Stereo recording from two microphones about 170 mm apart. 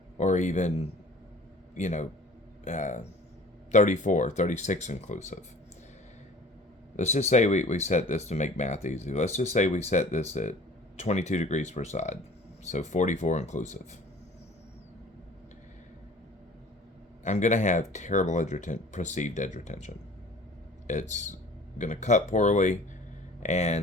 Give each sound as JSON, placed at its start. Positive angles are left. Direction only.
{"t": 0.2, "sound": "speech", "side_deg": 45}
{"t": 6.9, "sound": "speech", "side_deg": 40}
{"t": 17.2, "sound": "speech", "side_deg": 45}